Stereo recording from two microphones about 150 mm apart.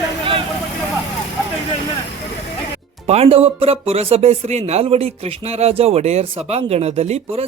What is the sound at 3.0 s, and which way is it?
Speech, 40° right (ahead or behind).